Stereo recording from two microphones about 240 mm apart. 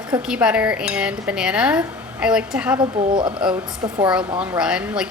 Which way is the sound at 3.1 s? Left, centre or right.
Centre.